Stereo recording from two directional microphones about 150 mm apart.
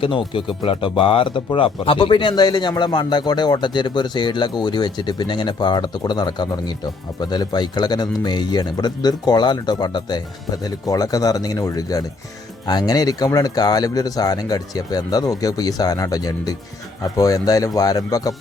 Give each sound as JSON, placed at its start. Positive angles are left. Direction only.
{"t": 0.0, "sound": "speech", "side_deg": 35}